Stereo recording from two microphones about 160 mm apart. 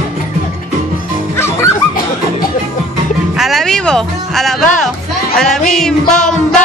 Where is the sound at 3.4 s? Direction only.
Centre (ahead or behind).